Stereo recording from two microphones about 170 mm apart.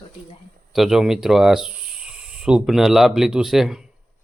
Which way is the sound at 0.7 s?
Centre (ahead or behind).